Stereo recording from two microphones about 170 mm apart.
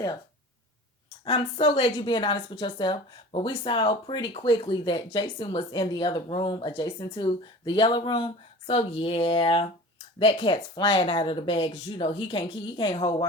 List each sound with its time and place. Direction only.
1.2 s a woman's voice: 35° left (ahead or behind)